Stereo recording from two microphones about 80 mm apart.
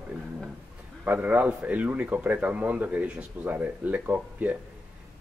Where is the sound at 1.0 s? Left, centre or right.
Right.